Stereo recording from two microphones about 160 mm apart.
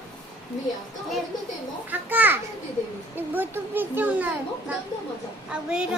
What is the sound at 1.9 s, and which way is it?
A child's voice, 10° right (ahead or behind).